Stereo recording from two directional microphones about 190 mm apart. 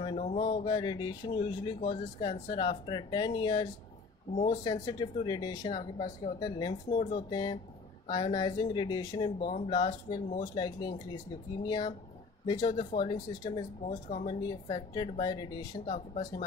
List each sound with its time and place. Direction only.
0.0 s speech: 30° left (ahead or behind)
15.9 s speech: 40° left (ahead or behind)